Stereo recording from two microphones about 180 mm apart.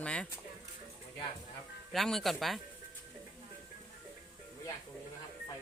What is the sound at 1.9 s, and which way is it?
Speech, centre (ahead or behind).